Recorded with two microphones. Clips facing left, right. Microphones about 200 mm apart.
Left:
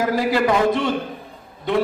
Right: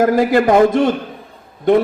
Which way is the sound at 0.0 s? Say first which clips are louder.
Right 6 dB; 50° right (ahead or behind).